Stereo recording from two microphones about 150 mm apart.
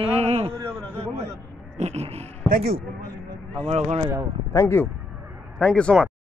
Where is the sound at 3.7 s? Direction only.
45° right (ahead or behind).